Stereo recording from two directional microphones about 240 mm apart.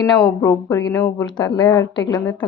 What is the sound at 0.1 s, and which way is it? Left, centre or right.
Speech, centre.